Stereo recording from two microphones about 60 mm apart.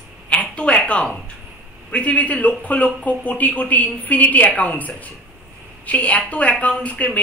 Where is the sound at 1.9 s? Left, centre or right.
Left.